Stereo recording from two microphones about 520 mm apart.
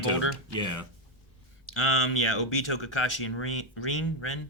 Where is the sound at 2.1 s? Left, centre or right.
Left.